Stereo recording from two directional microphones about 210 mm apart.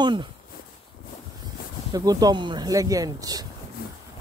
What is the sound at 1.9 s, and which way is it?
Speech, 15° right (ahead or behind).